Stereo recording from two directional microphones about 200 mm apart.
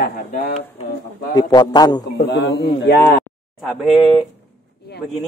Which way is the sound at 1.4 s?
20° left (ahead or behind).